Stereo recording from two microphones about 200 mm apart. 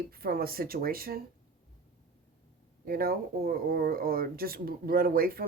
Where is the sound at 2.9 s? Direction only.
50° right (ahead or behind).